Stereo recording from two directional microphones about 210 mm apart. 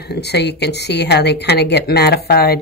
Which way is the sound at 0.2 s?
50° left (ahead or behind).